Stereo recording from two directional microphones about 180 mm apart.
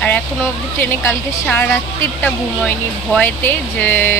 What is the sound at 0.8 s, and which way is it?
Speech, 10° left (ahead or behind).